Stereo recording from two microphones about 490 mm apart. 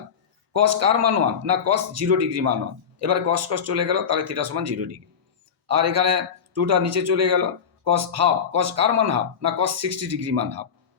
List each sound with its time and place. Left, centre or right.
0.5 s a man's voice: right